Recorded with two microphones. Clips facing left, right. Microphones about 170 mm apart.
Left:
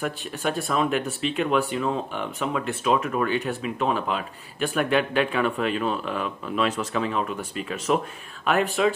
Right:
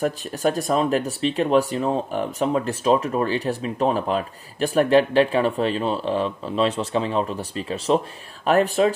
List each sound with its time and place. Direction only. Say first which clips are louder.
0.0 s speech: right 5 dB; 40° right (ahead or behind)